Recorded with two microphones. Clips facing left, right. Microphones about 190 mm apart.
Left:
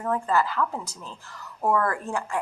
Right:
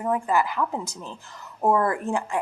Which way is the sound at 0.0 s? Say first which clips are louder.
Right 1 dB; 15° right (ahead or behind).